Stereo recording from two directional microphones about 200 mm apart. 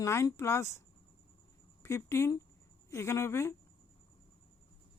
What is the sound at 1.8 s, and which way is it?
Speech, 15° left (ahead or behind).